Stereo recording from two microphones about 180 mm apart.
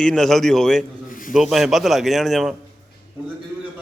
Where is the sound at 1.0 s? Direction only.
50° left (ahead or behind).